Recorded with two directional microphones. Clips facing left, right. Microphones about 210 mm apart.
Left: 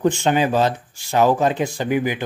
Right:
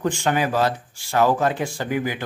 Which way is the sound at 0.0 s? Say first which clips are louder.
Left 4 dB; 20° left (ahead or behind).